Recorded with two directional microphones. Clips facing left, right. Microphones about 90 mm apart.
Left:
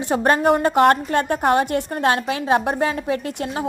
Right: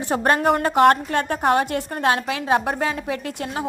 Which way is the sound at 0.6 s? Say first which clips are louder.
Even; 35° left (ahead or behind).